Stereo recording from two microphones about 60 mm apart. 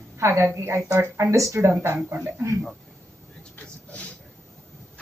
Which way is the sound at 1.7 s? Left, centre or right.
Right.